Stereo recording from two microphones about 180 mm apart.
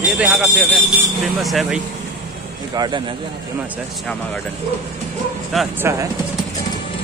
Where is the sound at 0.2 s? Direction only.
5° right (ahead or behind).